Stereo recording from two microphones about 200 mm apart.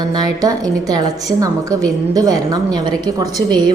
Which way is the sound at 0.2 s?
20° right (ahead or behind).